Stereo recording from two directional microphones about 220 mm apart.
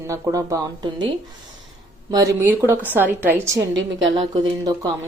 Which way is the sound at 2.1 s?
15° right (ahead or behind).